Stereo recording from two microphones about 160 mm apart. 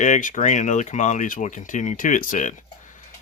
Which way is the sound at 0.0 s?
50° left (ahead or behind).